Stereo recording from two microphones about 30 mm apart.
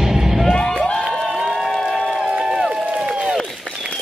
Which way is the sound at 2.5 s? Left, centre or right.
Right.